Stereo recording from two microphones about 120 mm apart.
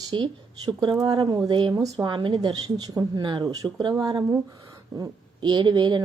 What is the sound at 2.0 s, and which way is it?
Speech, 40° right (ahead or behind).